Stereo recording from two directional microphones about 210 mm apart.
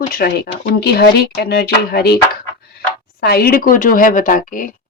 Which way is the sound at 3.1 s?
50° left (ahead or behind).